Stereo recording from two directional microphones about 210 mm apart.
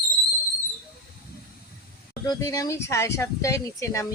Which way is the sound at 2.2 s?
15° left (ahead or behind).